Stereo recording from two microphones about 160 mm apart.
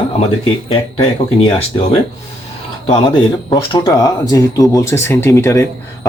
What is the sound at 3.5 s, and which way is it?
Speech, 25° left (ahead or behind).